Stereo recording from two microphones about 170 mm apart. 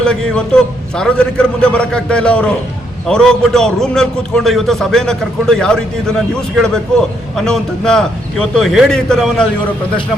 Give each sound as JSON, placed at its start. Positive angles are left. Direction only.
{"t": 0.0, "sound": "a man's voice", "side_deg": 5}